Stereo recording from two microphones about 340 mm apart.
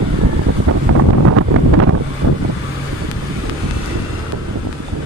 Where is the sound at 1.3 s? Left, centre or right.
Right.